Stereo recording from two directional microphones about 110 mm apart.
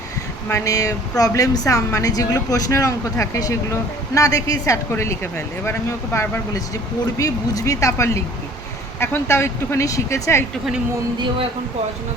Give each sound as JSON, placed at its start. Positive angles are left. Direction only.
{"t": 0.5, "sound": "speech", "side_deg": 30}